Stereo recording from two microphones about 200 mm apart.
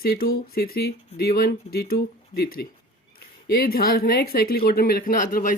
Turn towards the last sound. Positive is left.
turn(degrees=45)  # may be behind; listen again after turning